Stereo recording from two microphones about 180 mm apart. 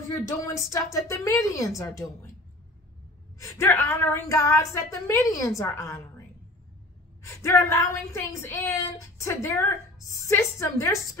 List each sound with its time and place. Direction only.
0.2 s speech: 15° left (ahead or behind)
3.3 s speech: 15° left (ahead or behind)
7.2 s speech: 15° left (ahead or behind)